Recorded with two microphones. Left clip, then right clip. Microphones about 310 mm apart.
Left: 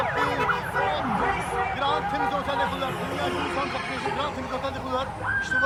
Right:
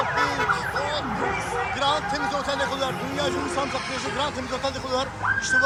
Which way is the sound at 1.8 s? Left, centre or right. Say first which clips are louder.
Right 3 dB; centre.